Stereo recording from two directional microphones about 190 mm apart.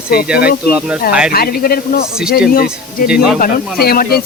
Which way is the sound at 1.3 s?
50° left (ahead or behind).